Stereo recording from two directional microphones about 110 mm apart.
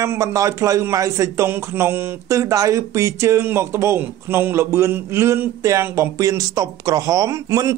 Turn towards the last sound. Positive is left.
turn(degrees=-30)  # may be behind; listen again after turning